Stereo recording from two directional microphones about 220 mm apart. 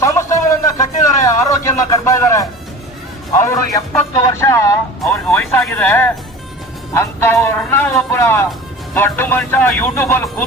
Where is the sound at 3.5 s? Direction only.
10° left (ahead or behind).